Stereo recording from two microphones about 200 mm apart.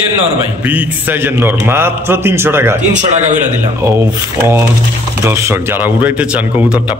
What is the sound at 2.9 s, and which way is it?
Speech, 35° right (ahead or behind).